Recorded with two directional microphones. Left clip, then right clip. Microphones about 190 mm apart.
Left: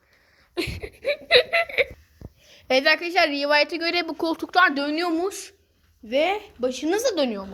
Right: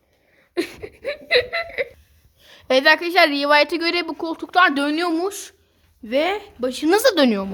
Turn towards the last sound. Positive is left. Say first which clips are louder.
# right 7 dB
turn(degrees=-25)  # may be behind; listen again after turning